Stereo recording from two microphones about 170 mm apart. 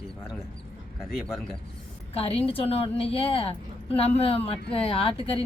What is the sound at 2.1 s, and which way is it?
A woman's voice, 35° left (ahead or behind).